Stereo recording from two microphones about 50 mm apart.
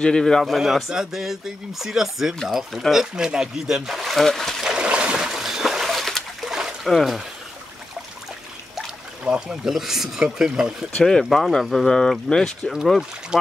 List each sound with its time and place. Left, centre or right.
0.0 s speech: centre
0.4 s speech: centre
4.6 s a sound: centre
6.5 s a sound: centre
6.9 s speech: centre
9.2 s speech: right
9.7 s speech: centre
11.0 s speech: centre
13.3 s speech: centre